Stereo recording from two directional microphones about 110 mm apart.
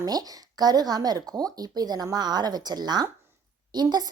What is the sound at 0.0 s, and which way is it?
A woman's voice, 35° right (ahead or behind).